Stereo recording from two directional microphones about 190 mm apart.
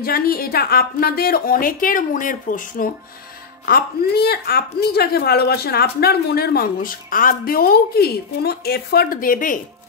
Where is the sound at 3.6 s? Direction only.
55° left (ahead or behind).